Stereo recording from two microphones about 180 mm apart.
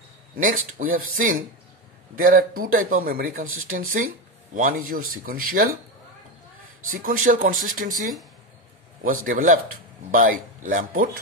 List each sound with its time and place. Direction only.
0.4 s speech: 50° right (ahead or behind)
6.9 s speech: 50° right (ahead or behind)
9.0 s speech: 50° right (ahead or behind)